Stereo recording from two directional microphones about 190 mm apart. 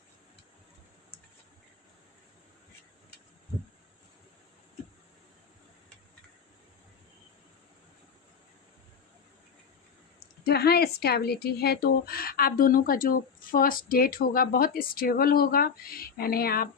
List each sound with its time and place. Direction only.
10.4 s speech: 60° left (ahead or behind)